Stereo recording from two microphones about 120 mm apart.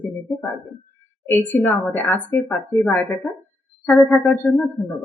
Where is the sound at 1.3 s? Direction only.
15° left (ahead or behind).